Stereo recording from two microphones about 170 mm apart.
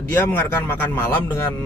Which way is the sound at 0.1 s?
10° left (ahead or behind).